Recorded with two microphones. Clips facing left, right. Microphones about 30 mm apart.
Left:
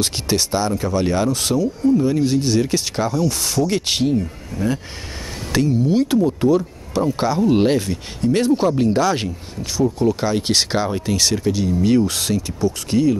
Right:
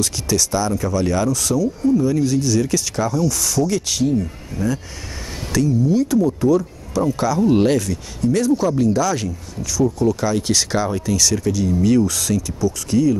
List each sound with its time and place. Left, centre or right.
0.0 s speech: left
5.5 s speech: left